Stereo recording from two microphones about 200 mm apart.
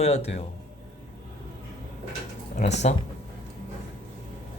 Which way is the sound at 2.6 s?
35° left (ahead or behind).